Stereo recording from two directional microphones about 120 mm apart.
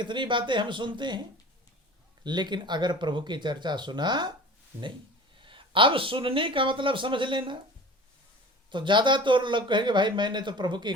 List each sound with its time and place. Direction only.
0.0 s a man's voice: 40° right (ahead or behind)
2.2 s a man's voice: 40° right (ahead or behind)
5.4 s speech: 45° right (ahead or behind)
8.7 s a man's voice: 40° right (ahead or behind)